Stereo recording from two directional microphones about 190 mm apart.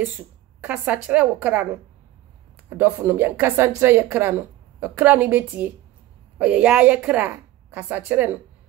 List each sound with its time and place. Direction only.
0.6 s speech: 5° right (ahead or behind)
2.8 s speech: 10° right (ahead or behind)